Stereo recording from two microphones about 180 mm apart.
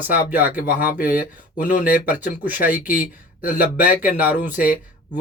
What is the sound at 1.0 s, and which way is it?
Speech, 50° left (ahead or behind).